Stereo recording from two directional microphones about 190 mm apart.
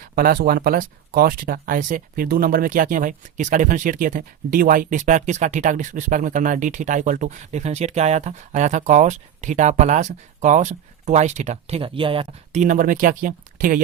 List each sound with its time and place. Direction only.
0.2 s speech: 50° right (ahead or behind)